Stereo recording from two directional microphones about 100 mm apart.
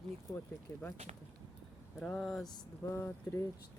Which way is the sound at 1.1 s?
90° right.